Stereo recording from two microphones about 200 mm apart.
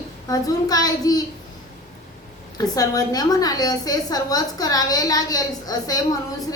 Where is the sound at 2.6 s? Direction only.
20° left (ahead or behind).